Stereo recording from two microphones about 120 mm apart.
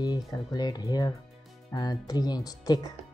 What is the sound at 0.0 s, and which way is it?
Speech, 35° left (ahead or behind).